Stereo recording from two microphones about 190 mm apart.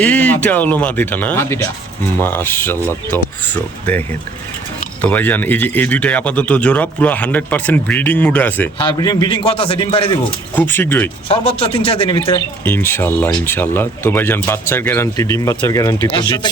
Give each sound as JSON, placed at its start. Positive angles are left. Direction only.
{"t": 0.0, "sound": "a sound", "side_deg": 10}
{"t": 0.4, "sound": "speech", "side_deg": 10}
{"t": 5.0, "sound": "speech", "side_deg": 10}
{"t": 8.8, "sound": "a man's voice", "side_deg": 20}
{"t": 10.5, "sound": "speech", "side_deg": 10}
{"t": 11.3, "sound": "a man's voice", "side_deg": 30}
{"t": 12.6, "sound": "speech", "side_deg": 10}